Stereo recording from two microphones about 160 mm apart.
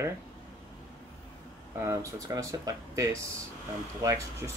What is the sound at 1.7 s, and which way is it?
Speech, 20° right (ahead or behind).